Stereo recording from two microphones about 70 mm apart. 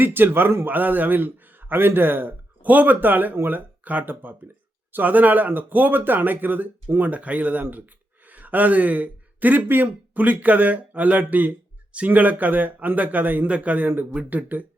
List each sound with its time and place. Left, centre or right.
0.0 s speech: right